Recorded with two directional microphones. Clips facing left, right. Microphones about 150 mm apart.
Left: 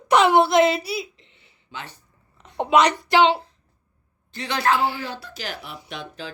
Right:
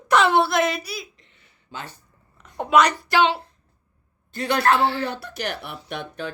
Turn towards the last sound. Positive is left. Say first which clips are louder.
# right 3 dB
turn(degrees=-55)  # may be behind; listen again after turning